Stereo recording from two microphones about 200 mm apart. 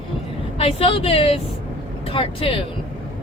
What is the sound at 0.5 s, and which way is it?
Speech, 25° left (ahead or behind).